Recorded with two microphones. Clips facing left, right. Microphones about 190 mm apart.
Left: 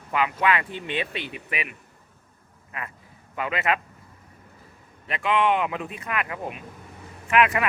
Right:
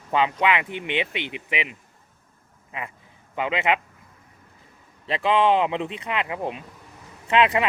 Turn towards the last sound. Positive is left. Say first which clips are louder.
# right 1 dB
turn(degrees=-25)  # may be behind; listen again after turning